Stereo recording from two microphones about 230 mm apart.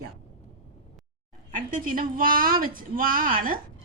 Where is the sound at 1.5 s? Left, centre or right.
Right.